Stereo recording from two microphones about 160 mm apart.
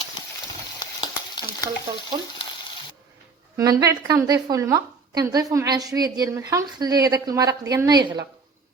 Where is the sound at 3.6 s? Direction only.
20° right (ahead or behind).